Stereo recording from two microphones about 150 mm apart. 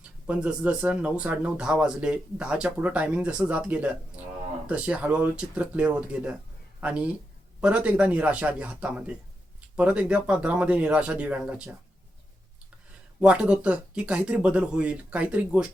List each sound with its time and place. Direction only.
0.0 s speech: 5° right (ahead or behind)
13.1 s speech: 5° right (ahead or behind)